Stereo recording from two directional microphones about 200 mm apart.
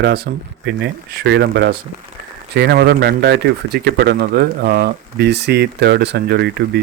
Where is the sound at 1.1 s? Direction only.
55° right (ahead or behind).